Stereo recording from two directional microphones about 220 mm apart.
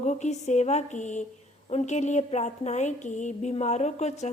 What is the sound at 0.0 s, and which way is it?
A woman's voice, 30° left (ahead or behind).